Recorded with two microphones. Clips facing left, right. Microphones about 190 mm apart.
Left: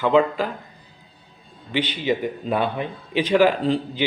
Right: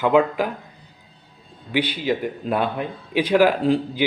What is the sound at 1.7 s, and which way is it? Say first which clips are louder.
Speech: right 1 dB; 10° right (ahead or behind).